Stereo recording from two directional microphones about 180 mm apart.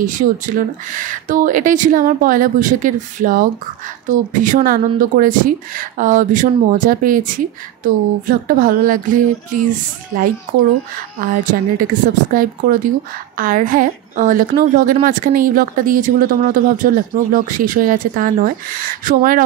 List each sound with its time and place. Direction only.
0.0 s a woman's voice: 45° right (ahead or behind)
11.1 s a woman's voice: 50° right (ahead or behind)